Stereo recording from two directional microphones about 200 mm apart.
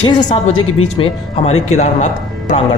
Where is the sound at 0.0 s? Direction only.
20° left (ahead or behind).